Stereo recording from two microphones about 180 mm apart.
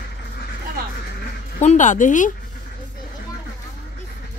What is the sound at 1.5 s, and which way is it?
Speech, 40° left (ahead or behind).